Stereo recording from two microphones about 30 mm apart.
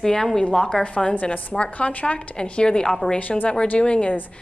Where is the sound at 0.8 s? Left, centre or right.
Left.